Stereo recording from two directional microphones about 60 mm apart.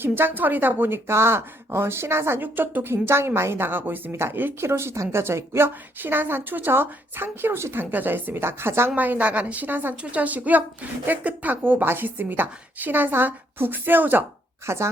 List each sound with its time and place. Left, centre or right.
0.0 s a woman's voice: right
9.0 s a woman's voice: right
14.7 s a woman's voice: right